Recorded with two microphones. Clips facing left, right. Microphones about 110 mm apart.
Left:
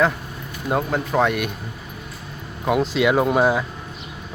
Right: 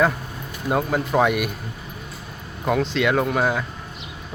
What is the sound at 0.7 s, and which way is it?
Speech, centre (ahead or behind).